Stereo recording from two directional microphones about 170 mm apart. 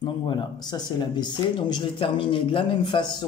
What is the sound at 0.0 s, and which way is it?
Speech, 25° left (ahead or behind).